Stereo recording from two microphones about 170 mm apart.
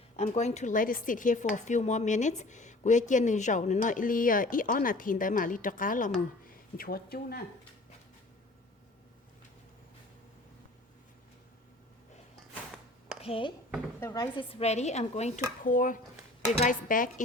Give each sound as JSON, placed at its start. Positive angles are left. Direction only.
{"t": 0.2, "sound": "a woman's voice", "side_deg": 40}
{"t": 13.2, "sound": "speech", "side_deg": 35}
{"t": 14.0, "sound": "speech", "side_deg": 20}
{"t": 14.5, "sound": "a woman's voice", "side_deg": 40}